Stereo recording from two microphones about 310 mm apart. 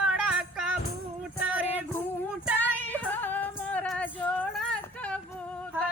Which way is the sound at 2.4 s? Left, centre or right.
Centre.